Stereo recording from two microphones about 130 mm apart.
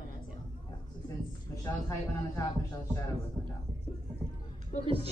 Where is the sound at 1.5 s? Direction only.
25° left (ahead or behind).